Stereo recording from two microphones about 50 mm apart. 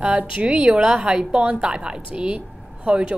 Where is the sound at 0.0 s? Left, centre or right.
Right.